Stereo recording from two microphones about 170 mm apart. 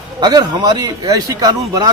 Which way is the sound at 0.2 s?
25° right (ahead or behind).